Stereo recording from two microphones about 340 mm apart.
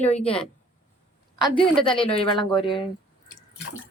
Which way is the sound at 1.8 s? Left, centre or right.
Centre.